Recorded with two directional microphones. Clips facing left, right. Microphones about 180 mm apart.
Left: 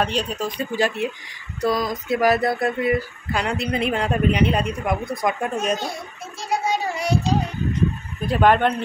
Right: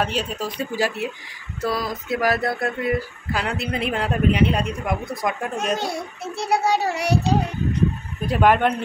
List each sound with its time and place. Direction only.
0.0 s speech: 5° right (ahead or behind)
6.3 s child singing: 65° right (ahead or behind)
8.3 s speech: 10° right (ahead or behind)